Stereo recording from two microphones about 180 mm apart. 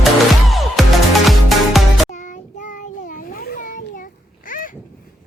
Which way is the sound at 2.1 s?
45° left (ahead or behind).